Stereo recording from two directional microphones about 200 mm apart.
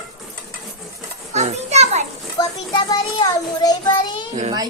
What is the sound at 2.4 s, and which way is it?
Child singing, 20° left (ahead or behind).